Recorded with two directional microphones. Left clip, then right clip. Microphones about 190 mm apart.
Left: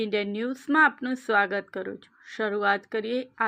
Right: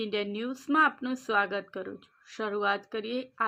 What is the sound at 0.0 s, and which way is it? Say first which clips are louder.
Speech: left 4 dB; 20° left (ahead or behind).